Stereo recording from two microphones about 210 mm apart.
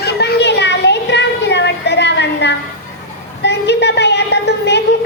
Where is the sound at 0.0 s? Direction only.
50° left (ahead or behind).